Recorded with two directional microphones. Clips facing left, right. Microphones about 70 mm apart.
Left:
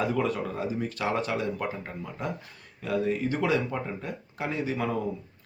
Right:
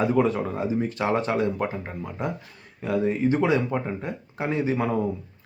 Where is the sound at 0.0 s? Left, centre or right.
Right.